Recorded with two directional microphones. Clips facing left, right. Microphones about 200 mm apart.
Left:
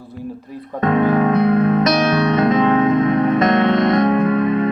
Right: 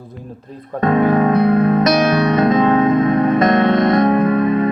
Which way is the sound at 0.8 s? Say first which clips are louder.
Right 1 dB; 35° right (ahead or behind).